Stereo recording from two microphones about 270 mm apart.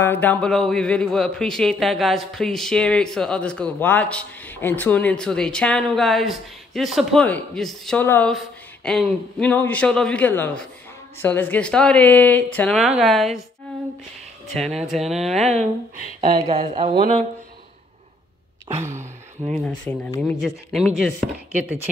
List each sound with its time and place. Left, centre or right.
0.0 s a man's voice: centre
14.5 s a man's voice: centre
16.2 s speech: right
18.8 s a sound: centre
19.6 s a man's voice: centre